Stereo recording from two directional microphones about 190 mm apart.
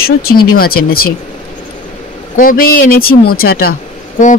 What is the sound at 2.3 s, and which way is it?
Speech, 45° left (ahead or behind).